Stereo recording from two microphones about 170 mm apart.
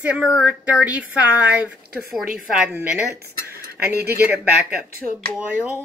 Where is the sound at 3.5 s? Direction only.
65° right (ahead or behind).